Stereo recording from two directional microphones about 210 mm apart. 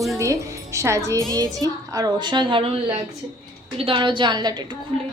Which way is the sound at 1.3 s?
15° right (ahead or behind).